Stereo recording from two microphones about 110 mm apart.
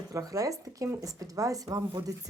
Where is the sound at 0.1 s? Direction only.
30° right (ahead or behind).